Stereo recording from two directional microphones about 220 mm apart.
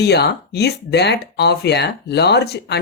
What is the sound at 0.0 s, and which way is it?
Speech, 50° left (ahead or behind).